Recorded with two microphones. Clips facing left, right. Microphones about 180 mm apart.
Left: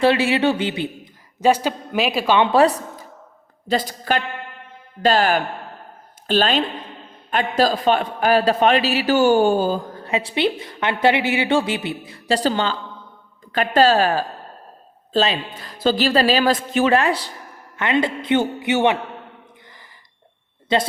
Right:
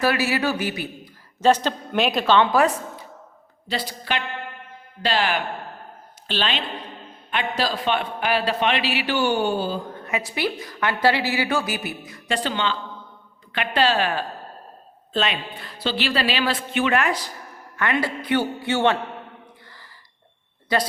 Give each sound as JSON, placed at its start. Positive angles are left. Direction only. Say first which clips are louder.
{"t": 0.0, "sound": "a man's voice", "louder": "left 5 dB", "side_deg": 25}
{"t": 1.4, "sound": "a woman's voice", "louder": "left 1 dB", "side_deg": 10}
{"t": 2.5, "sound": "a man's voice", "louder": "left 4 dB", "side_deg": 35}
{"t": 20.7, "sound": "a man's voice", "louder": "left 3 dB", "side_deg": 25}